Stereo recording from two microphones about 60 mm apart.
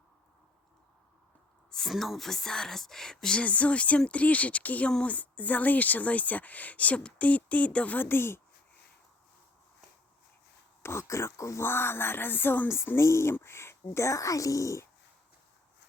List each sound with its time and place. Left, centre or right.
1.9 s speech: centre; by 7.9 s left
7.9 s speech: left
10.8 s speech: left
11.6 s speech: left
12.6 s speech: left